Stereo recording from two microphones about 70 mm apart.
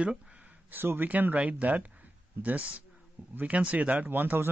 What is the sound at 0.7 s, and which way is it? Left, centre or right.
A man's voice, right.